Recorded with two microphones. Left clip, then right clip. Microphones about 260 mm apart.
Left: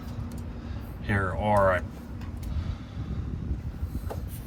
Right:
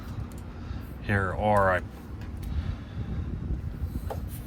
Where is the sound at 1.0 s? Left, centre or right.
Centre.